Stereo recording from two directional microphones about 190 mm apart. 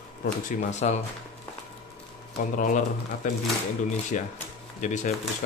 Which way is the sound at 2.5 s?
45° left (ahead or behind).